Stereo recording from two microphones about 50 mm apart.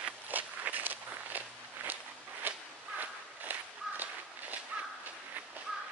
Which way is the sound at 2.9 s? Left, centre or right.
Right.